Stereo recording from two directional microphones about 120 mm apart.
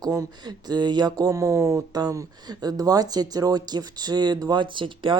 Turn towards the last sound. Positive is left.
turn(degrees=-45)  # may be behind; listen again after turning